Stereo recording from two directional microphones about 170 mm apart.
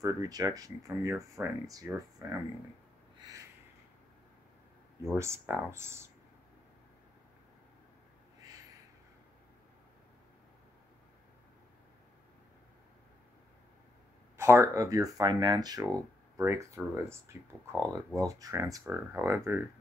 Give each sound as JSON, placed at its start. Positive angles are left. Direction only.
{"t": 0.0, "sound": "speech", "side_deg": -20}
{"t": 3.2, "sound": "a sound", "side_deg": -25}
{"t": 5.1, "sound": "speech", "side_deg": -15}
{"t": 14.3, "sound": "speech", "side_deg": -15}